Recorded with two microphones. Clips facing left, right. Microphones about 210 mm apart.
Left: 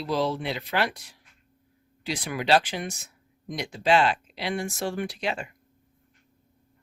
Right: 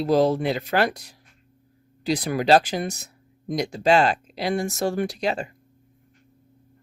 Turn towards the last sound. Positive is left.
turn(degrees=-35)  # may be behind; listen again after turning